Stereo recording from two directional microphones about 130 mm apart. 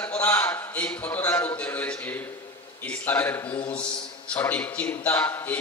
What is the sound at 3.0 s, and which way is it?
A man's voice, 15° left (ahead or behind).